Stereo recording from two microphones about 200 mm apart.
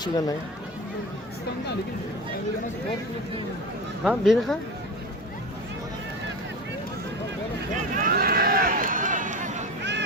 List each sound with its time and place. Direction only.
0.0 s speech: 20° left (ahead or behind)
4.0 s speech: 5° right (ahead or behind)
7.9 s run: 45° right (ahead or behind)